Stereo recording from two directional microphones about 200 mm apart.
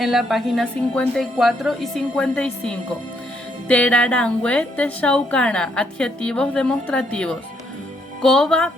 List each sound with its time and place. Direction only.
0.0 s a woman's voice: centre (ahead or behind)